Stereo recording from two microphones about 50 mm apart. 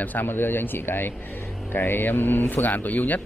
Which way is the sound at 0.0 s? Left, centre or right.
Left.